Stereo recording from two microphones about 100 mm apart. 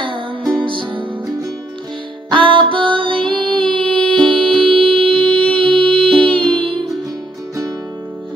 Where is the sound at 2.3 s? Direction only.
60° right (ahead or behind).